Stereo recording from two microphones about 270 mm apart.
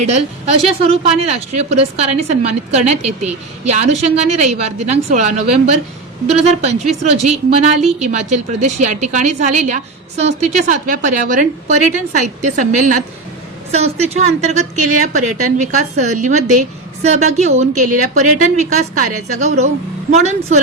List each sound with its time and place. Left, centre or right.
0.0 s a woman's voice: right